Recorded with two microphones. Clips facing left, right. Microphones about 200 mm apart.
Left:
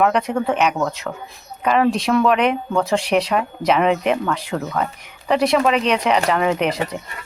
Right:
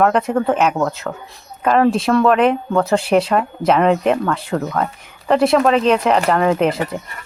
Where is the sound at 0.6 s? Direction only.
5° right (ahead or behind).